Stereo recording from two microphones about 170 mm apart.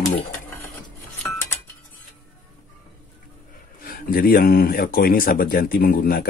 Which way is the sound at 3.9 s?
60° left (ahead or behind).